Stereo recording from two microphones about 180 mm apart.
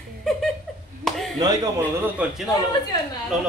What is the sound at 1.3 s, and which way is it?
Speech, 20° right (ahead or behind).